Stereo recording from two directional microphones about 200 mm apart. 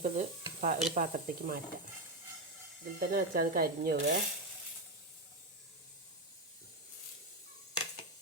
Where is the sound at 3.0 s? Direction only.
45° right (ahead or behind).